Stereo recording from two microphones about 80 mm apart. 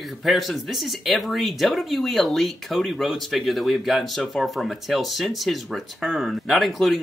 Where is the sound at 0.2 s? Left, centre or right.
Centre.